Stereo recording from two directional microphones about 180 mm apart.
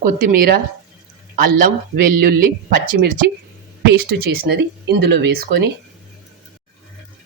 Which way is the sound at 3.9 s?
65° right (ahead or behind).